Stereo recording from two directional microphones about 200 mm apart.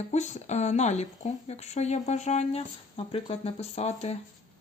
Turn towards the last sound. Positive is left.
turn(degrees=35)  # may be behind; listen again after turning